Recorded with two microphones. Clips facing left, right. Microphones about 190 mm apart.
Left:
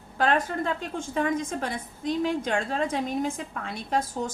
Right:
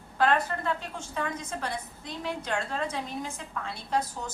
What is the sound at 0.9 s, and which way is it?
A woman's voice, 50° left (ahead or behind).